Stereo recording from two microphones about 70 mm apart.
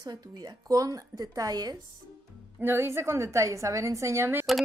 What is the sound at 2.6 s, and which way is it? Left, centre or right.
A woman's voice, right.